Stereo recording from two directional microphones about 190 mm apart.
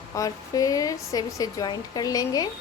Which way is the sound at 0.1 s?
20° left (ahead or behind).